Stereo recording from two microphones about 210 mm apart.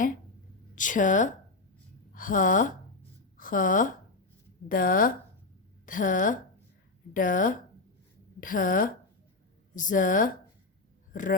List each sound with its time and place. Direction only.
0.8 s a woman's voice: 40° left (ahead or behind)